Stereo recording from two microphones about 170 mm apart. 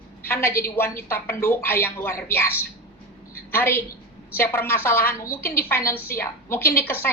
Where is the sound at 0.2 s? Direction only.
15° left (ahead or behind).